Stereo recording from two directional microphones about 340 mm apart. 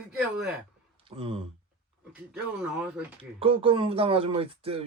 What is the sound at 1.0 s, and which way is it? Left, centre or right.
Speech, centre.